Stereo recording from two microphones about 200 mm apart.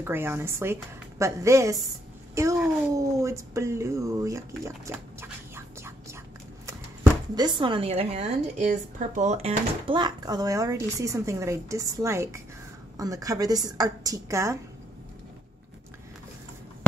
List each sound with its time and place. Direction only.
0.0 s a woman's voice: 10° right (ahead or behind)